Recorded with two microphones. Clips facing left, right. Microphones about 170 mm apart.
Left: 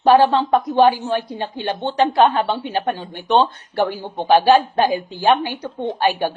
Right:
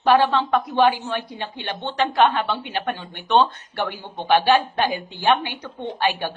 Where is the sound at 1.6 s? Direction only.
15° left (ahead or behind).